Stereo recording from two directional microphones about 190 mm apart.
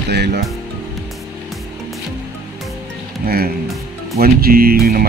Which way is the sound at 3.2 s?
55° right (ahead or behind).